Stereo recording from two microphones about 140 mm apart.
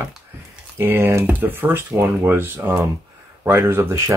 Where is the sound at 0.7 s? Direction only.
15° right (ahead or behind).